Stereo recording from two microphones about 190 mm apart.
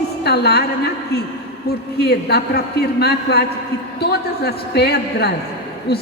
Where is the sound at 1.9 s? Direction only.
60° left (ahead or behind).